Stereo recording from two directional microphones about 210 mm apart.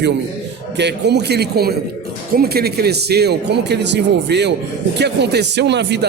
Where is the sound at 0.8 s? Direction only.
55° right (ahead or behind).